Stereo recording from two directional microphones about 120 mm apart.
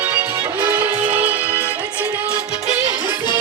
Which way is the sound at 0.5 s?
10° right (ahead or behind).